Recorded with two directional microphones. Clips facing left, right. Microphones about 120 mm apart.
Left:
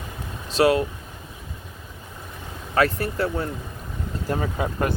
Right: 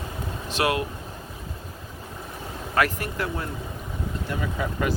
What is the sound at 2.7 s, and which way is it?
Speech, 30° left (ahead or behind).